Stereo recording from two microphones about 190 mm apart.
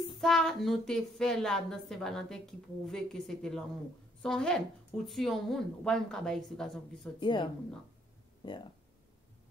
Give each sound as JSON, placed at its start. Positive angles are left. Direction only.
{"t": 0.0, "sound": "speech", "side_deg": 0}
{"t": 7.2, "sound": "speech", "side_deg": 25}